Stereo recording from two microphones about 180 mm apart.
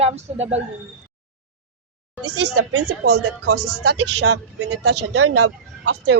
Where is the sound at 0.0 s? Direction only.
35° right (ahead or behind).